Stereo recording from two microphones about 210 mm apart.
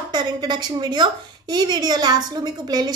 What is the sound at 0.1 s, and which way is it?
A woman's voice, 20° right (ahead or behind).